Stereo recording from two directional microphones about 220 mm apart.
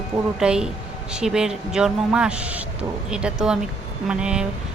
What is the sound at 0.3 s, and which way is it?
A woman's voice, 5° right (ahead or behind).